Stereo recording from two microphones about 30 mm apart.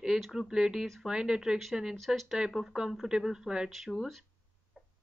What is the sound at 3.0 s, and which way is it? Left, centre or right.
Speech, centre.